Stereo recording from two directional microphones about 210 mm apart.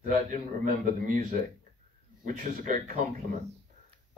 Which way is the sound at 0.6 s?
40° right (ahead or behind).